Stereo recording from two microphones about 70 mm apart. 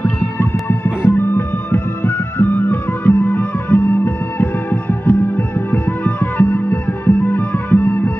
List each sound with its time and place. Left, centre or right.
0.0 s music: left